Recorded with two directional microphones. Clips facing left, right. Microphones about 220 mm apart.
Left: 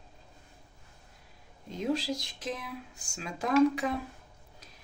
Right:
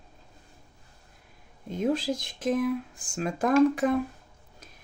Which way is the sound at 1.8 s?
50° right (ahead or behind).